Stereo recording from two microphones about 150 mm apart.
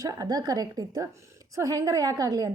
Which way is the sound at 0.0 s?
25° right (ahead or behind).